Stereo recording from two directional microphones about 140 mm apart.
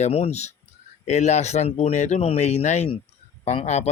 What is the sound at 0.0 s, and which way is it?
Speech, 50° left (ahead or behind).